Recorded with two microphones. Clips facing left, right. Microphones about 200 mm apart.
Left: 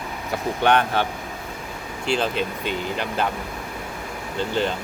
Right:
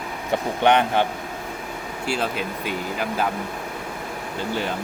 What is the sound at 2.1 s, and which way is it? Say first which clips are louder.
Speech: left 3 dB; 5° right (ahead or behind).